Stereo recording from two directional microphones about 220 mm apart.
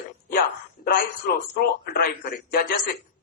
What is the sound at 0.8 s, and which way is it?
Speech, 40° left (ahead or behind).